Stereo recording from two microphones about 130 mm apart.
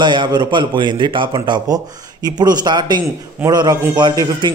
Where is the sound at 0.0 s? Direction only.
35° right (ahead or behind).